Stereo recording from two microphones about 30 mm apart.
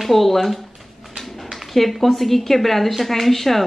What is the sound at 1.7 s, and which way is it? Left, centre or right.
A woman's voice, centre.